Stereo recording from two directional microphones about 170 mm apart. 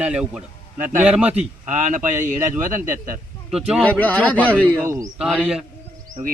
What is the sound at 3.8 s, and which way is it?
Speech, 10° left (ahead or behind).